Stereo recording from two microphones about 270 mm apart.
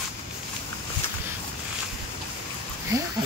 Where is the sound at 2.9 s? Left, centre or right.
Centre.